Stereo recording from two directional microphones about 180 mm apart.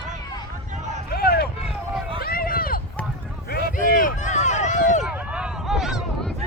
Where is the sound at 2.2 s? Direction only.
55° left (ahead or behind).